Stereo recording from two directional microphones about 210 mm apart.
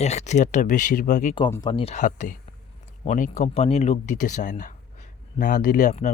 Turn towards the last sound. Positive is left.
turn(degrees=35)  # may be behind; listen again after turning